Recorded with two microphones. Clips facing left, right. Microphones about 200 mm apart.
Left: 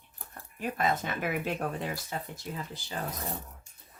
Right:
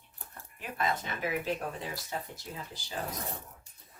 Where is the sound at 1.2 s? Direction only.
60° left (ahead or behind).